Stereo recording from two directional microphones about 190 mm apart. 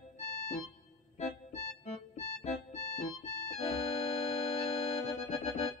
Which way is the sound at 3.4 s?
35° left (ahead or behind).